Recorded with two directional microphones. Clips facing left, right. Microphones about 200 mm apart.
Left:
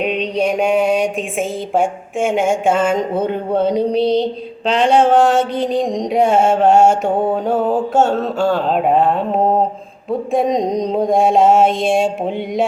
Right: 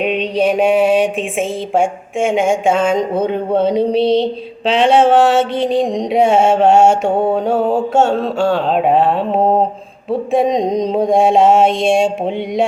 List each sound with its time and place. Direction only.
0.2 s mantra: 5° right (ahead or behind)